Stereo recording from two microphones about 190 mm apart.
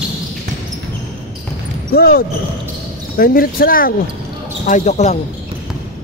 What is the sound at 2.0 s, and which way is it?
A man's voice, 55° left (ahead or behind).